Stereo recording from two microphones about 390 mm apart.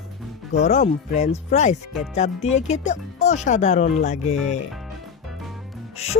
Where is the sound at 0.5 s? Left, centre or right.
Centre.